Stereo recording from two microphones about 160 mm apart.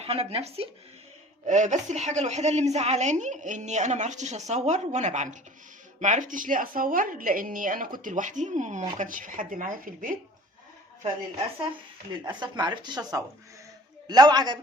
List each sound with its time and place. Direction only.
0.0 s speech: 40° right (ahead or behind)
1.5 s a woman's voice: 50° right (ahead or behind)
12.2 s speech: 25° right (ahead or behind)